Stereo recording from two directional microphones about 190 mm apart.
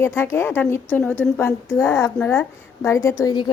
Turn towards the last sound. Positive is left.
turn(degrees=20)  # may be behind; listen again after turning